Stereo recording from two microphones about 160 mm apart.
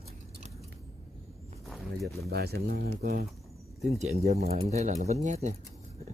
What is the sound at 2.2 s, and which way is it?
Speech, 85° right.